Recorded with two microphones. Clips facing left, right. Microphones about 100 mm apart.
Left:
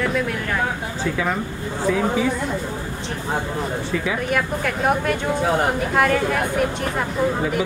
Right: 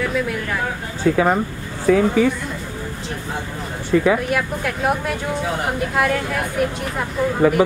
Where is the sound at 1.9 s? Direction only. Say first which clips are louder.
Right 7 dB; 60° right (ahead or behind).